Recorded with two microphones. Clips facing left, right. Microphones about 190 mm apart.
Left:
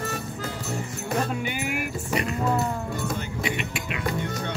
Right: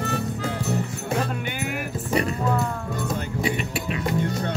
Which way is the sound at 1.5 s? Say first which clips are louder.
Even; 10° left (ahead or behind).